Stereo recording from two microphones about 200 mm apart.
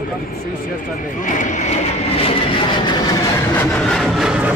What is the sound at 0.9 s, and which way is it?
Vehicle, 40° left (ahead or behind).